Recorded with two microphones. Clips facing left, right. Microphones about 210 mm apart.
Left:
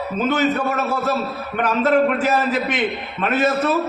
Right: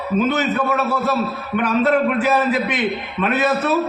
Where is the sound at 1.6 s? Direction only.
45° left (ahead or behind).